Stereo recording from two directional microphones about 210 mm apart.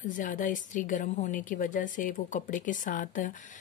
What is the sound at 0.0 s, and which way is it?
A woman's voice, 40° left (ahead or behind).